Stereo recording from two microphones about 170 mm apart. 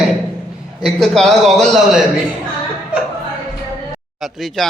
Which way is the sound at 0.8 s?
Centre (ahead or behind).